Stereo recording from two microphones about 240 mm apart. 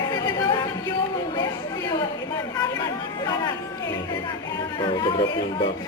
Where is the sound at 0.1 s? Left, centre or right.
Centre.